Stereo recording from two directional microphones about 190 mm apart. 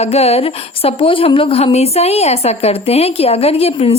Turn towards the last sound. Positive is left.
turn(degrees=30)  # may be behind; listen again after turning